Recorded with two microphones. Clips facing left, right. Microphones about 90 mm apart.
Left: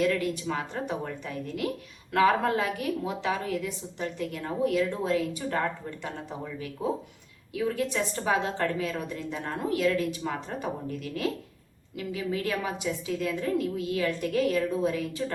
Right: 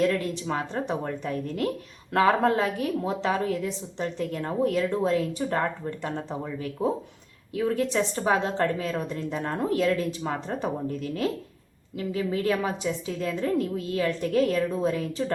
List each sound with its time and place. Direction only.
0.0 s a woman's voice: 30° right (ahead or behind)
7.9 s a woman's voice: 25° right (ahead or behind)